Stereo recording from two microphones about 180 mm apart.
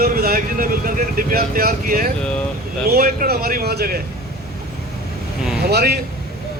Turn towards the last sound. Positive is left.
turn(degrees=-60)  # may be behind; listen again after turning